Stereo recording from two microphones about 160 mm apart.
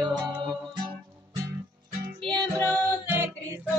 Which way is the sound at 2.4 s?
20° right (ahead or behind).